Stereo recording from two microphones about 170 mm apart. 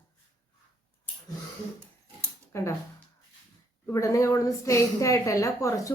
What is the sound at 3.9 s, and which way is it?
A woman's voice, 20° left (ahead or behind).